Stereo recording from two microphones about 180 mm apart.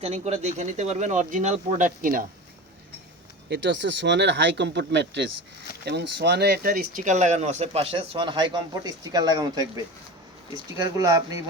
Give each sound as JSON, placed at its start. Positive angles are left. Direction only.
{"t": 0.0, "sound": "speech", "side_deg": -35}
{"t": 3.5, "sound": "speech", "side_deg": -80}
{"t": 10.7, "sound": "speech", "side_deg": -20}